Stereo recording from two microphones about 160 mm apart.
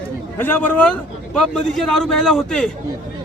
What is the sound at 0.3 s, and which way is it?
A man's voice, 10° left (ahead or behind).